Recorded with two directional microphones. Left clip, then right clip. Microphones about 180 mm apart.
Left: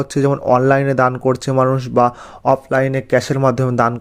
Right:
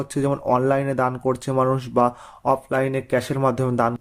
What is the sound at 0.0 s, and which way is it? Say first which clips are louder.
Speech: left 6 dB; 30° left (ahead or behind).